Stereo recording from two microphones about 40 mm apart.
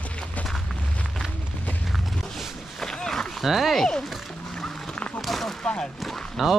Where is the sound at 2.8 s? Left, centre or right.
Centre.